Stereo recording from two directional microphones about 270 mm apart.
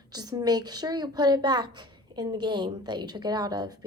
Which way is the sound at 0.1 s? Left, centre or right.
Centre.